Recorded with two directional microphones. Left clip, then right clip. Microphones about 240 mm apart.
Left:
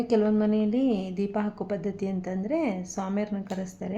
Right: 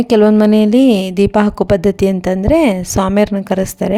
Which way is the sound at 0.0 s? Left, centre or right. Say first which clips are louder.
Right 14 dB; right.